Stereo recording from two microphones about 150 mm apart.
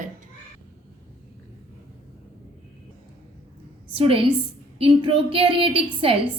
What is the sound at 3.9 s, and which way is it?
A woman's voice, 40° right (ahead or behind).